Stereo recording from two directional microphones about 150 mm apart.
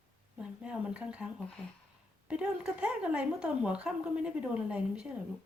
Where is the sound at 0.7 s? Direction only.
10° right (ahead or behind).